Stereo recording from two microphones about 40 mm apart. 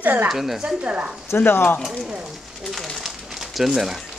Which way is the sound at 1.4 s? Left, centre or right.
Left.